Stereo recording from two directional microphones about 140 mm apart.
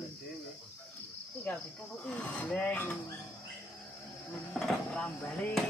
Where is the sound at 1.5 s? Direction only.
10° left (ahead or behind).